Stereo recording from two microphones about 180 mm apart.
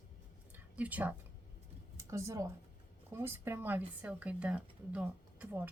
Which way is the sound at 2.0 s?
15° right (ahead or behind).